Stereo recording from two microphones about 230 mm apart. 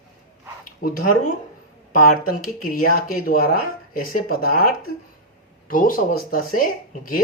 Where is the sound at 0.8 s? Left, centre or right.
Left.